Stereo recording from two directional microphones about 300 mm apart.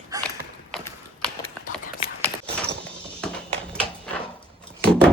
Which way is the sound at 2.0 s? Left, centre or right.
Centre.